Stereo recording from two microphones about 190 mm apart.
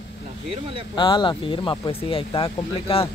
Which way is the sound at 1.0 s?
25° left (ahead or behind).